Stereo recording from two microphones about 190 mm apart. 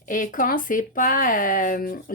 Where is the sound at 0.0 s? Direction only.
45° left (ahead or behind).